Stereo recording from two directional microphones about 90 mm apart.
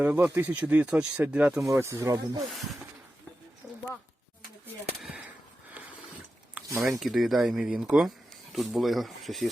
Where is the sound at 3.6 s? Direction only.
30° right (ahead or behind).